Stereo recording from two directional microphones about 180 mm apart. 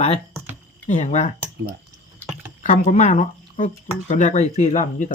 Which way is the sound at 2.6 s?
45° left (ahead or behind).